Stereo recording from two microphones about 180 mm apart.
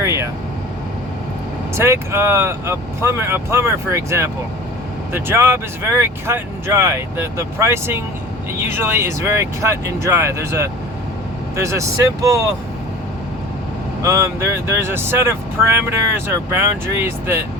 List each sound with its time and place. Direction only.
0.0 s vehicle: 15° right (ahead or behind)
1.7 s speech: 15° right (ahead or behind)
14.0 s speech: 15° right (ahead or behind)